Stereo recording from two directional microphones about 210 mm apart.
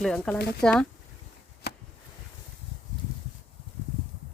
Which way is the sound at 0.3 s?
50° left (ahead or behind).